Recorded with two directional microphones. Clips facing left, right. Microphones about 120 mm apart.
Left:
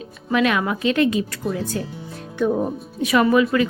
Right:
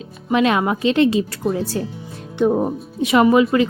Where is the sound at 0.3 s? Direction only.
25° right (ahead or behind).